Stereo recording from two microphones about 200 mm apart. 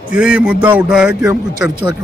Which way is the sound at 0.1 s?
5° right (ahead or behind).